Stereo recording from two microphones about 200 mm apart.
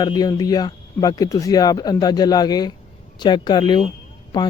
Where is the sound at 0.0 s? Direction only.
20° left (ahead or behind).